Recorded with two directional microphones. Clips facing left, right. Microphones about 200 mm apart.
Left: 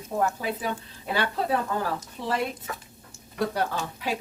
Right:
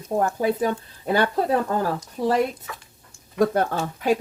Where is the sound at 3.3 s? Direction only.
50° right (ahead or behind).